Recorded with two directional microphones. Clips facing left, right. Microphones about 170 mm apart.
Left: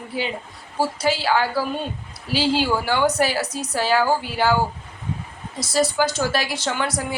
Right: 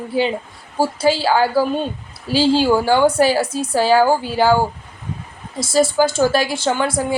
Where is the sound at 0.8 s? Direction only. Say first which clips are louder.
Right 5 dB; 30° right (ahead or behind).